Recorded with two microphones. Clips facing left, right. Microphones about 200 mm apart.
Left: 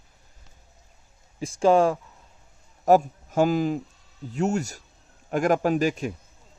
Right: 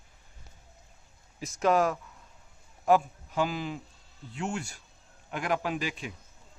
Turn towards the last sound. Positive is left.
turn(degrees=45)  # may be behind; listen again after turning